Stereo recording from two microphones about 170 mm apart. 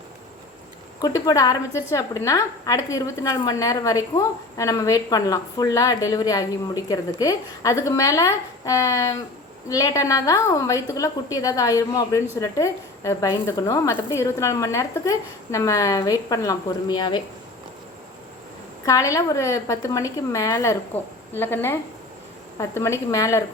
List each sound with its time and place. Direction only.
1.0 s a woman's voice: 20° left (ahead or behind)
18.9 s a woman's voice: 20° left (ahead or behind)